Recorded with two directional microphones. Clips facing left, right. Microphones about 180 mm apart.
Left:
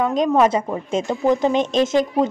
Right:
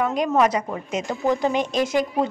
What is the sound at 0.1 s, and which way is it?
A woman's voice, 20° left (ahead or behind).